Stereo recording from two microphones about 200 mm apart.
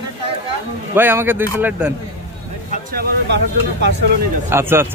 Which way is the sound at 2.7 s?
45° right (ahead or behind).